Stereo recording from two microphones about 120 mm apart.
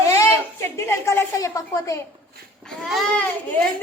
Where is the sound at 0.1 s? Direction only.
25° left (ahead or behind).